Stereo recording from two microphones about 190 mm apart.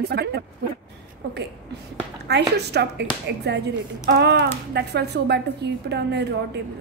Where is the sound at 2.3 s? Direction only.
60° right (ahead or behind).